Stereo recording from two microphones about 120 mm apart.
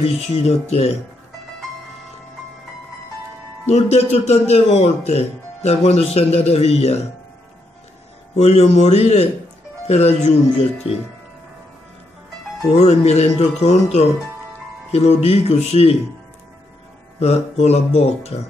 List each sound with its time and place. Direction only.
0.0 s speech: 60° left (ahead or behind)
3.6 s speech: 65° left (ahead or behind)
8.4 s speech: 65° left (ahead or behind)
12.7 s speech: 65° left (ahead or behind)
17.2 s speech: 60° left (ahead or behind)